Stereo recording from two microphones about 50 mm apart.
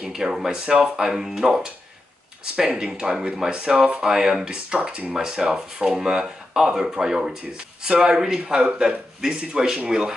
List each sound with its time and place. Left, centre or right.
0.1 s speech: centre